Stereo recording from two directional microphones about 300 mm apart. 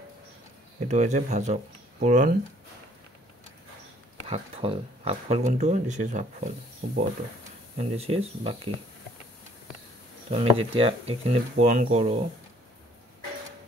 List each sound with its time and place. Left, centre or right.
0.7 s speech: right
4.3 s speech: centre
10.3 s speech: centre